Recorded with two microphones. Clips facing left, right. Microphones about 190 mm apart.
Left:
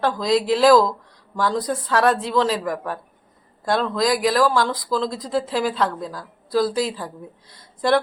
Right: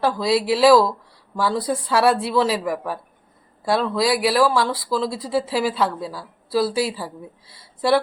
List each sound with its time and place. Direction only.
0.0 s speech: 5° right (ahead or behind)